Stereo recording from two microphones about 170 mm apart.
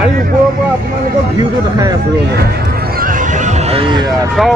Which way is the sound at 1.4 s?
20° right (ahead or behind).